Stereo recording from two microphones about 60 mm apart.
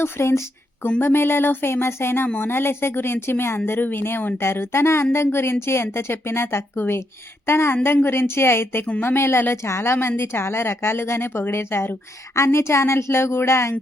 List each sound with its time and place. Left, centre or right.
0.0 s speech: left
2.2 s speech: left
2.5 s speech: left